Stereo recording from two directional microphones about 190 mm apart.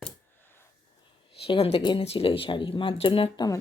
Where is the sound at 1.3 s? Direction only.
30° left (ahead or behind).